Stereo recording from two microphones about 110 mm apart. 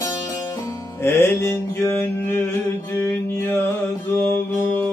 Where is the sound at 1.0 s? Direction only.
25° left (ahead or behind).